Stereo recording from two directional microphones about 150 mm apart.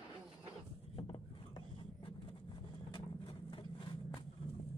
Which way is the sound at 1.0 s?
35° left (ahead or behind).